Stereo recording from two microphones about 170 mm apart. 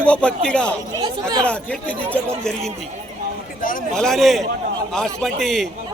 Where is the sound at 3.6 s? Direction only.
55° left (ahead or behind).